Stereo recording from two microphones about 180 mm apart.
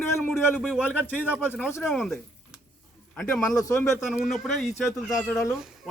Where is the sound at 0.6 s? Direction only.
Centre (ahead or behind).